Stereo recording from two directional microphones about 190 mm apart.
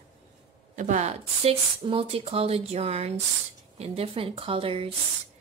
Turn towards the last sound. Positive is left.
turn(degrees=-30)  # may be behind; listen again after turning